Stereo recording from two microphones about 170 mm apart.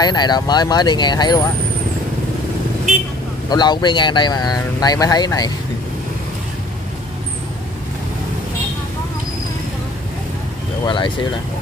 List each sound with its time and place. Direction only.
0.0 s speech: 25° left (ahead or behind)
3.4 s speech: 25° left (ahead or behind)
10.9 s speech: 30° left (ahead or behind)